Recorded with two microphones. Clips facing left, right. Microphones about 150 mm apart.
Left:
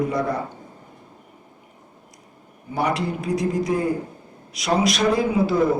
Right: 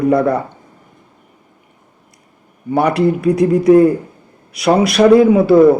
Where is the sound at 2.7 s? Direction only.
65° right (ahead or behind).